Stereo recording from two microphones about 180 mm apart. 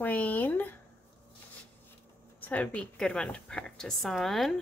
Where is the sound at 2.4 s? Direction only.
5° left (ahead or behind).